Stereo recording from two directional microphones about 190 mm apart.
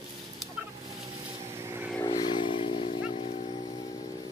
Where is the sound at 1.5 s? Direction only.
15° right (ahead or behind).